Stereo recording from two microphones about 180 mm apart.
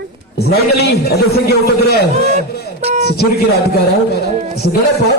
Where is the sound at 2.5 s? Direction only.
65° left (ahead or behind).